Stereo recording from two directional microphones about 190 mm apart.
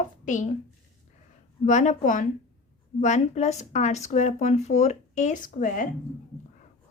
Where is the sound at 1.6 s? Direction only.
40° left (ahead or behind).